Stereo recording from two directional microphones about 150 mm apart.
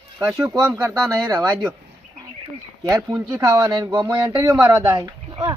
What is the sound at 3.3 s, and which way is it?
Speech, 25° right (ahead or behind).